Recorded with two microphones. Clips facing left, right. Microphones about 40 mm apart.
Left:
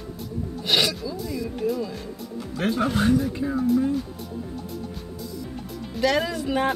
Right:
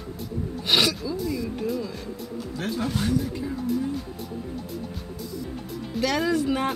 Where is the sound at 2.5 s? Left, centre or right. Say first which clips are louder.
Left 5 dB; left.